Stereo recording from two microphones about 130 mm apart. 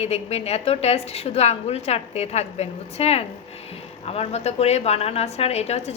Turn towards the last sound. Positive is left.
turn(degrees=55)  # may be behind; listen again after turning